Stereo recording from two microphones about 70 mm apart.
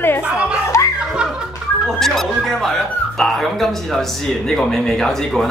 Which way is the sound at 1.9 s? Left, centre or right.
Centre.